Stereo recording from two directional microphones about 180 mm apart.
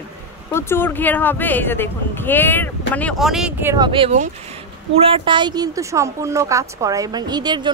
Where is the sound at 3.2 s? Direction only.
5° right (ahead or behind).